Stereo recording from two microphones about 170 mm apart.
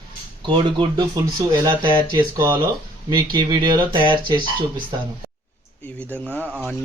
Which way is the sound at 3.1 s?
25° right (ahead or behind).